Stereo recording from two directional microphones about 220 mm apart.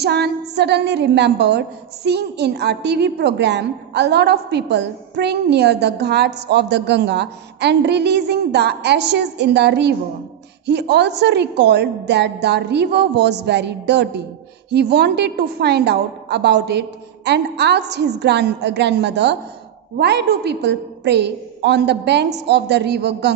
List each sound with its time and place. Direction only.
0.0 s a woman's voice: 50° right (ahead or behind)